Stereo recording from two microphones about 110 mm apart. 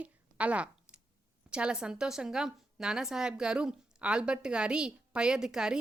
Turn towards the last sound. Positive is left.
turn(degrees=-5)  # may be behind; listen again after turning